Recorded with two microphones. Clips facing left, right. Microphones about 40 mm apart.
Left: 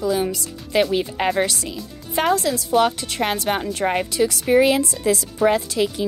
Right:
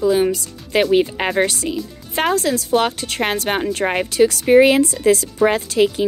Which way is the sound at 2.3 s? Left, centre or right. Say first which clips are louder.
Right 2 dB; right.